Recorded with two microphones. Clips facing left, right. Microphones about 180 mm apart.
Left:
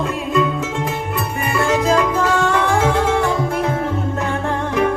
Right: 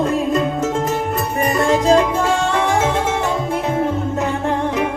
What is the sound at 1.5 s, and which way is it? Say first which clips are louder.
Music: right 2 dB; 35° right (ahead or behind).